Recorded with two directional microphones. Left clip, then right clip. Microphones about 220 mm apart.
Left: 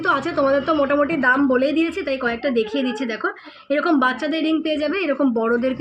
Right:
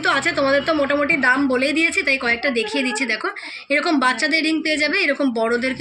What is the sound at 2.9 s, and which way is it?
Speech, 40° right (ahead or behind).